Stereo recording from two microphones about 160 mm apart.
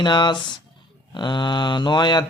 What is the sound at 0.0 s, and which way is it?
Mantra, 30° left (ahead or behind).